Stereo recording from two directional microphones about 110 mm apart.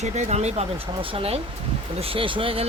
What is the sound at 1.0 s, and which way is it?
Speech, 60° right (ahead or behind).